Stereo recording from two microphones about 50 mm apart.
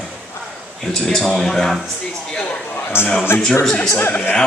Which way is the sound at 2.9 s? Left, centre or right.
Left.